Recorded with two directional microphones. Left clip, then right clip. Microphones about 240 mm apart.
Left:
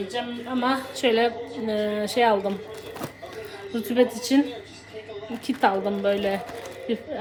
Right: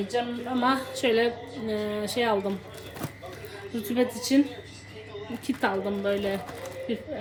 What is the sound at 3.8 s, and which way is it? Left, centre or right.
Speech, centre.